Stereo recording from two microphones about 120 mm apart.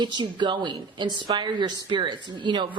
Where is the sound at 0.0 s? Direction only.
40° right (ahead or behind).